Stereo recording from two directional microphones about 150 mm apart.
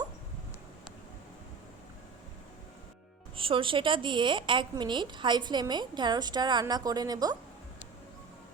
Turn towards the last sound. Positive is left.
turn(degrees=-25)  # may be behind; listen again after turning